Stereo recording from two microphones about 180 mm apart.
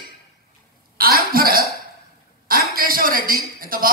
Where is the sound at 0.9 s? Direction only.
55° right (ahead or behind).